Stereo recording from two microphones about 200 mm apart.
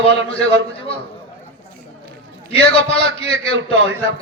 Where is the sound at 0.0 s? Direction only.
30° left (ahead or behind).